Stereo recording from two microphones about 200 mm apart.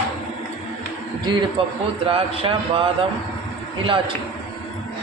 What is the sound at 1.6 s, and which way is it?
A man's voice, 25° right (ahead or behind).